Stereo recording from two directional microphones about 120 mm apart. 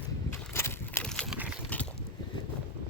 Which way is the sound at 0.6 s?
20° left (ahead or behind).